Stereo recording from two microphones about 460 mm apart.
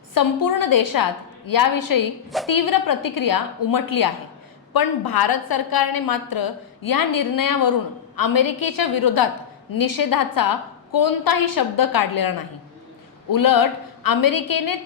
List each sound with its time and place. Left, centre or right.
0.1 s a woman's voice: left
13.3 s a woman's voice: left